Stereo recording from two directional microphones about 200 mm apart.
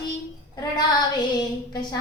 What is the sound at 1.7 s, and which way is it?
Child singing, 20° left (ahead or behind).